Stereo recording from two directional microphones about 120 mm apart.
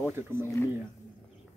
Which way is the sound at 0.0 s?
20° right (ahead or behind).